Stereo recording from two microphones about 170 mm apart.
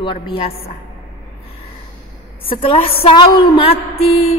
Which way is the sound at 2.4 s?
30° left (ahead or behind).